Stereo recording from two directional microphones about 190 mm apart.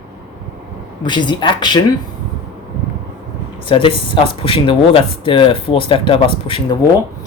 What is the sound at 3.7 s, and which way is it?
Speech, 25° left (ahead or behind).